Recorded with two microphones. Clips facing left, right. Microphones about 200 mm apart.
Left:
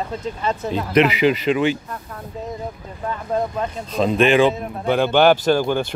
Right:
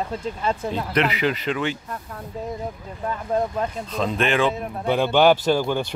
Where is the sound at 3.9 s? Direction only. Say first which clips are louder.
Left 8 dB; 15° left (ahead or behind).